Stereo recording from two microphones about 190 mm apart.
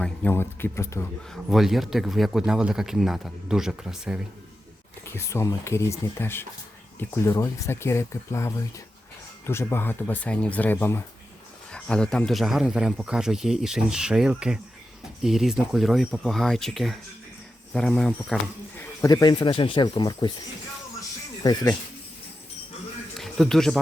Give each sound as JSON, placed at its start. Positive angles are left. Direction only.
{"t": 0.0, "sound": "speech", "side_deg": 10}
{"t": 1.3, "sound": "speech", "side_deg": 0}
{"t": 5.0, "sound": "speech", "side_deg": 15}
{"t": 19.0, "sound": "speech", "side_deg": 20}
{"t": 21.4, "sound": "speech", "side_deg": 20}
{"t": 23.1, "sound": "speech", "side_deg": 0}